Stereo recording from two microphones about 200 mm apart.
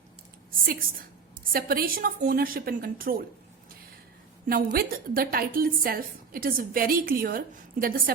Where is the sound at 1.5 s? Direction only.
45° right (ahead or behind).